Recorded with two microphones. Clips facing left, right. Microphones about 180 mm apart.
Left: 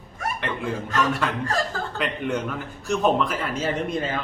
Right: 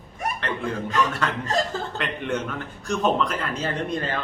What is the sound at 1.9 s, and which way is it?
A man's voice, centre (ahead or behind).